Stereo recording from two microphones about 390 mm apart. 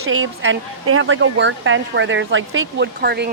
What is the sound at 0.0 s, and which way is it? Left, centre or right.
Speech, right.